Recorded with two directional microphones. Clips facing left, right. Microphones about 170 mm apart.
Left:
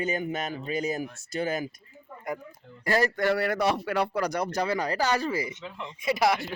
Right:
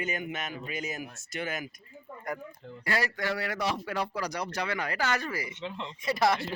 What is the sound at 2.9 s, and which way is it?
A man's voice, 45° left (ahead or behind).